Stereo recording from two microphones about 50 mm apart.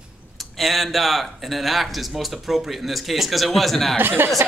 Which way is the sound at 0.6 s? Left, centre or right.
Centre.